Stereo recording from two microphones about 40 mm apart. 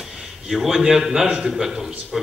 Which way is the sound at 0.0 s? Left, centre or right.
Centre.